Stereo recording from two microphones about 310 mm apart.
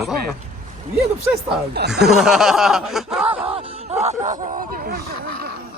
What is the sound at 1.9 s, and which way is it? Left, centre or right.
Speech, centre.